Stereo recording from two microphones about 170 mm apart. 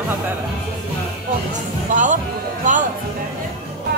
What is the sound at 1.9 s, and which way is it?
Speech, 50° right (ahead or behind).